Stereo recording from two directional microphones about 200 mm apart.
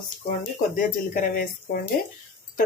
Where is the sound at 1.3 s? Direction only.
45° left (ahead or behind).